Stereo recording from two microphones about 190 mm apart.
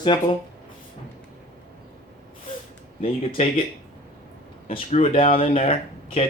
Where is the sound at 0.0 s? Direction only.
25° left (ahead or behind).